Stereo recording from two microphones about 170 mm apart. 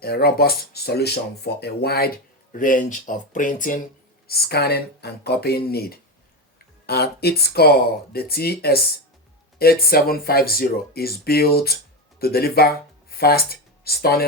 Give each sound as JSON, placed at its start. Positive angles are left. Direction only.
{"t": 0.0, "sound": "speech", "side_deg": 65}
{"t": 4.3, "sound": "speech", "side_deg": 70}